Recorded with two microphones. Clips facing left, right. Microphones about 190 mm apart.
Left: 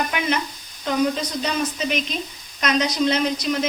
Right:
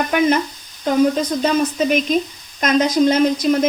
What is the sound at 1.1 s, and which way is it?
Speech, 45° right (ahead or behind).